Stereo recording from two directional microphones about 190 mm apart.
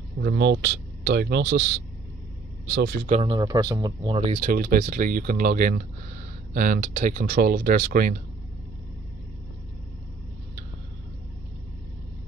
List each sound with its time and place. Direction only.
0.2 s speech: 60° right (ahead or behind)
3.1 s speech: 25° right (ahead or behind); by 8.2 s 55° right (ahead or behind)